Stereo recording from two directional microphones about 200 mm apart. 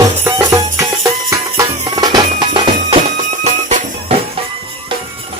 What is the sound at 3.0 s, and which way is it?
Music, 35° right (ahead or behind).